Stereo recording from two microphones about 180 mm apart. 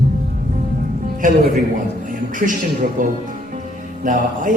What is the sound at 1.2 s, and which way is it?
Speech, 45° right (ahead or behind).